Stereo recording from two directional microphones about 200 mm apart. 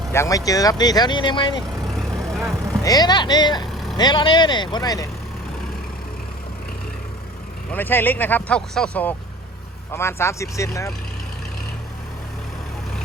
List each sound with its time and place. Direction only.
0.1 s speech: 15° left (ahead or behind)
2.0 s vehicle: centre (ahead or behind)
2.8 s speech: 20° left (ahead or behind)
7.7 s speech: 10° left (ahead or behind)